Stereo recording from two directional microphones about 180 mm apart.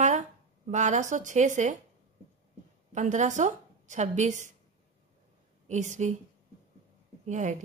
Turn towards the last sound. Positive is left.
turn(degrees=-40)  # may be behind; listen again after turning